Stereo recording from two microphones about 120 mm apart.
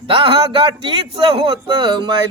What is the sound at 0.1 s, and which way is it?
Music, 45° right (ahead or behind).